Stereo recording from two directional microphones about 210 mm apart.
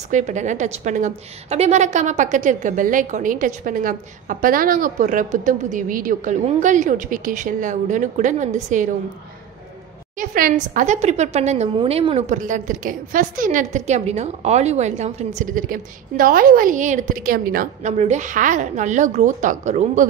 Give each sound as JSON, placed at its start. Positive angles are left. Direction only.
{"t": 0.1, "sound": "a woman's voice", "side_deg": -35}
{"t": 10.1, "sound": "a woman's voice", "side_deg": -40}